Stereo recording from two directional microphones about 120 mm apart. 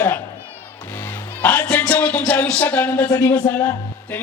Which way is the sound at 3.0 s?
30° left (ahead or behind).